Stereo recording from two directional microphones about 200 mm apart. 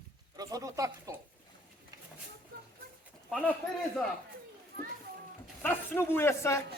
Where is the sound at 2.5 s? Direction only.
50° right (ahead or behind).